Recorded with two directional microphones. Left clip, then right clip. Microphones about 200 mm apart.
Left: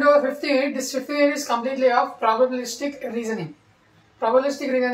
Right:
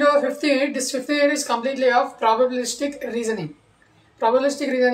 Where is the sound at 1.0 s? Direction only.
30° right (ahead or behind).